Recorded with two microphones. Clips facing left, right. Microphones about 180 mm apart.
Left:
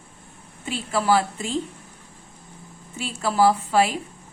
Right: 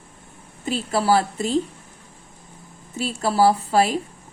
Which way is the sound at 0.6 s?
40° right (ahead or behind).